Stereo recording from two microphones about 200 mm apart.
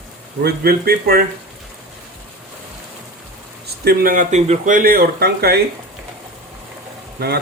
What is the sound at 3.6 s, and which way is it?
Speech, 50° right (ahead or behind).